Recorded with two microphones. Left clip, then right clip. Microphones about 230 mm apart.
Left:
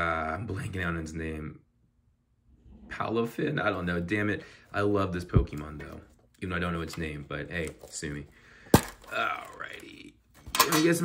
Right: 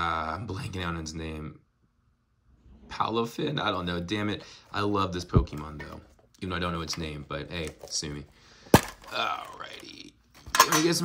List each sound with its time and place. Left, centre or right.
0.0 s speech: centre
2.9 s speech: centre
8.0 s a sound: centre